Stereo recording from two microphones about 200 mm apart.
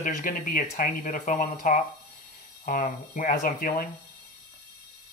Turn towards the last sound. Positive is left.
turn(degrees=45)  # may be behind; listen again after turning